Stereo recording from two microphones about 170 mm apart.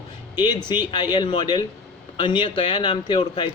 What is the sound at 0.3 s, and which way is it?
A man's voice, 25° left (ahead or behind).